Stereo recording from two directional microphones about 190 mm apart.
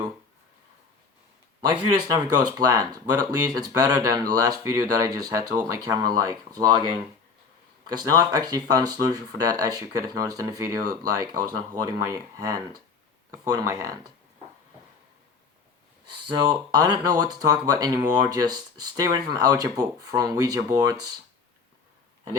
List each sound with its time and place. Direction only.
1.6 s speech: 20° right (ahead or behind)
7.9 s speech: 20° right (ahead or behind)
16.2 s speech: 20° right (ahead or behind)